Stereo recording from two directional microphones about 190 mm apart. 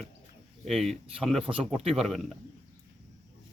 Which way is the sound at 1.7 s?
Centre (ahead or behind).